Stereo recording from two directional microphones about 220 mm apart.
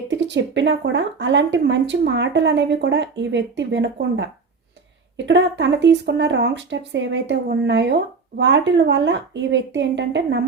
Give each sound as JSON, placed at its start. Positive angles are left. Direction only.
{"t": 0.1, "sound": "speech", "side_deg": -55}